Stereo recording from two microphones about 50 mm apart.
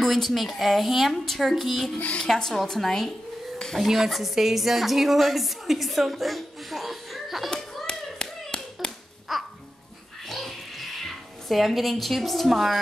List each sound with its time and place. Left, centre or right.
0.0 s a woman's voice: centre
2.2 s a woman's voice: centre
7.5 s hands: centre
8.8 s babbling: centre
9.3 s music: centre
10.2 s a sound: centre